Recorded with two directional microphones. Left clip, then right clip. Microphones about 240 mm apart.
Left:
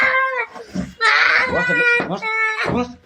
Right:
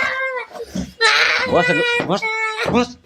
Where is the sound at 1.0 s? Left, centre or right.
Right.